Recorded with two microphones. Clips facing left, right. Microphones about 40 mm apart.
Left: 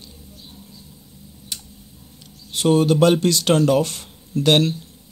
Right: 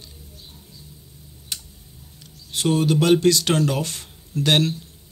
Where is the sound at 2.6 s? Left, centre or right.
Left.